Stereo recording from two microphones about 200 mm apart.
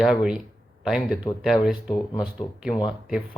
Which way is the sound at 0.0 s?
5° right (ahead or behind).